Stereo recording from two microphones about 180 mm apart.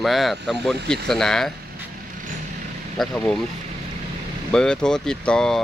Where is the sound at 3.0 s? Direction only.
5° left (ahead or behind).